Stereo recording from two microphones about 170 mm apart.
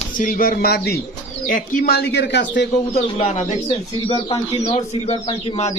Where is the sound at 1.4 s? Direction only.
50° left (ahead or behind); by 3.0 s 85° left.